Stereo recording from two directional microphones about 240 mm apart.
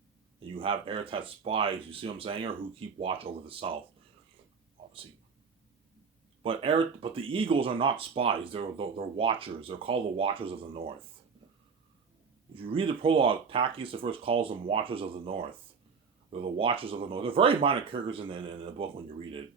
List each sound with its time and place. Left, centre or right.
0.3 s speech: right
6.4 s speech: right
12.5 s speech: right